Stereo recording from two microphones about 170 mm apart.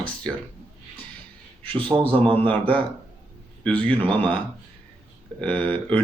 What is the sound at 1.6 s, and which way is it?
Speech, 30° right (ahead or behind).